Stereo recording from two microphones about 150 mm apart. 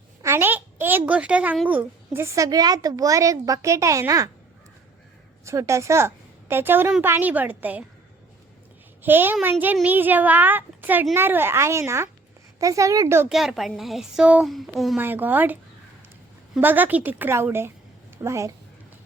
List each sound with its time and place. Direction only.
0.2 s a child's voice: 15° right (ahead or behind)
5.5 s a woman's voice: 20° right (ahead or behind)
9.0 s a child's voice: 15° right (ahead or behind)
13.2 s a woman's voice: centre (ahead or behind)
14.9 s a child's voice: 10° right (ahead or behind)
16.6 s a child's voice: 10° right (ahead or behind)